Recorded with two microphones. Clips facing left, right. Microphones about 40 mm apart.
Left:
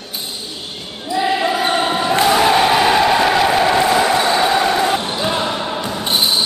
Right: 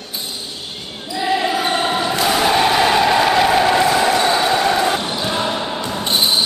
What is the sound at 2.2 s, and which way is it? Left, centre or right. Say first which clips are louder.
Crowd: left 2 dB; centre.